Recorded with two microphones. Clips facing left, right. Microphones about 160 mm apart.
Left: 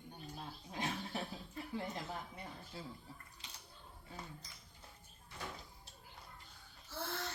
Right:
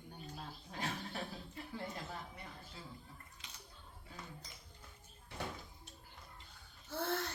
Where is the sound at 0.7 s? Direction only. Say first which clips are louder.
Left 1 dB; 15° left (ahead or behind).